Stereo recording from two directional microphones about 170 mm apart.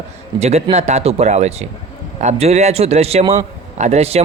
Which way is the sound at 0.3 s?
40° right (ahead or behind).